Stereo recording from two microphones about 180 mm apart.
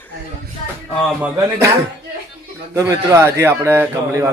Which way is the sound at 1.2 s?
15° right (ahead or behind).